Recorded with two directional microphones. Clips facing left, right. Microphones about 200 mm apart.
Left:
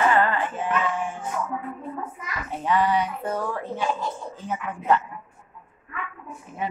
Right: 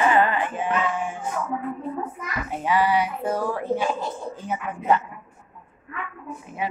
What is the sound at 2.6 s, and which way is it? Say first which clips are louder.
Speech: right 1 dB; 5° right (ahead or behind).